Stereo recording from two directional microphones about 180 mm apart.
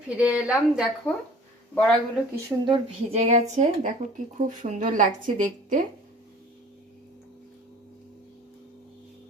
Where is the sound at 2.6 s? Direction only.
30° right (ahead or behind).